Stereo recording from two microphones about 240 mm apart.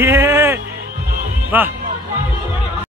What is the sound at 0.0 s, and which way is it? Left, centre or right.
Music, centre.